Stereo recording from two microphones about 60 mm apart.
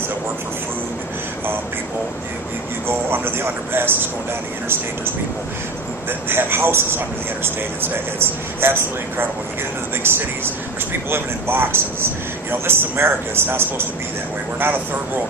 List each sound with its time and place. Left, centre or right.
2.8 s music: right
6.1 s speech: right